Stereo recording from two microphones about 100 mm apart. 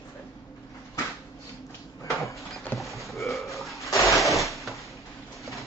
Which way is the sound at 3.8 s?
30° left (ahead or behind).